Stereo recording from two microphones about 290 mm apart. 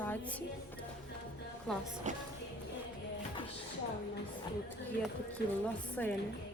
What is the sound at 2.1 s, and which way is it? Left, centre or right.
Music, right.